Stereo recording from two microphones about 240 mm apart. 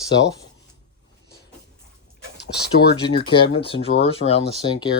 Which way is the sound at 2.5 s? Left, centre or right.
Left.